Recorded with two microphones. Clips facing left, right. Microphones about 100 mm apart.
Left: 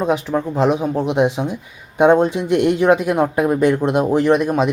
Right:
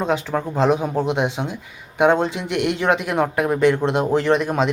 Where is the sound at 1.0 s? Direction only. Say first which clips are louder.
Left 5 dB; 25° right (ahead or behind).